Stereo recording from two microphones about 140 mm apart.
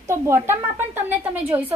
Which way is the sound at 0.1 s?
20° right (ahead or behind).